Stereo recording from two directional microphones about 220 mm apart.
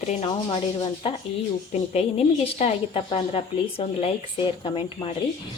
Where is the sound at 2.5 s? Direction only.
25° left (ahead or behind).